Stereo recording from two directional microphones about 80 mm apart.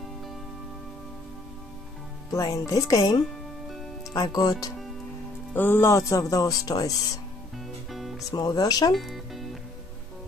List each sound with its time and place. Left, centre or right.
2.3 s speech: left
5.5 s speech: left
7.5 s music: centre
8.3 s speech: left
8.9 s music: centre